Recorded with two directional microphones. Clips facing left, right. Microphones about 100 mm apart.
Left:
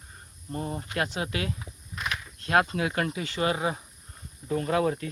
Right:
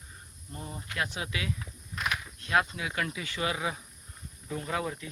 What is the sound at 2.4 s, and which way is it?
Speech, 50° left (ahead or behind).